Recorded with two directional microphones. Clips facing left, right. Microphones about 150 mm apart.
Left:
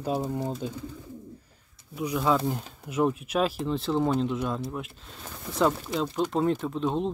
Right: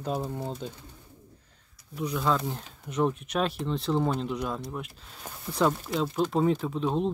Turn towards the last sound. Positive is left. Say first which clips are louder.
# even
turn(degrees=0)  # may be behind; listen again after turning